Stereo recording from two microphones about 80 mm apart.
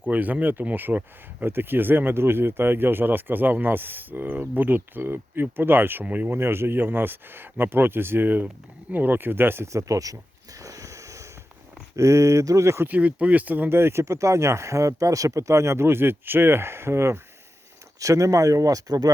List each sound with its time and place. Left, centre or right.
0.1 s speech: centre
9.7 s speech: right
10.6 s a sound: right
11.9 s speech: right
12.9 s speech: centre; by 19.1 s right